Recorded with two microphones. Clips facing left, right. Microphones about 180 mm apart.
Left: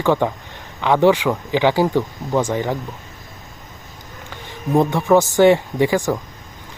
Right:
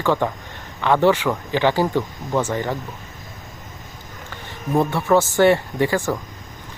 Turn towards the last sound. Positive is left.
turn(degrees=15)  # may be behind; listen again after turning